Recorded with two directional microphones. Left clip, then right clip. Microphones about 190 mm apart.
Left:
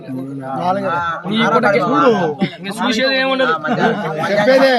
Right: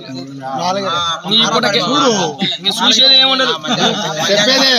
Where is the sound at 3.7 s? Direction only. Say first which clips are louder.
Right 2 dB; 25° left (ahead or behind).